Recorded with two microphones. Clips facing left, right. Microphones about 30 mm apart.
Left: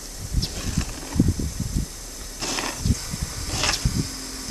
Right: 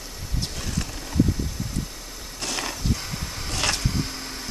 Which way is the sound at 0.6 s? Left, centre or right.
Centre.